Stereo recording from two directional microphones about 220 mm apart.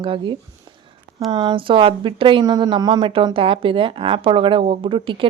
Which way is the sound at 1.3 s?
20° right (ahead or behind).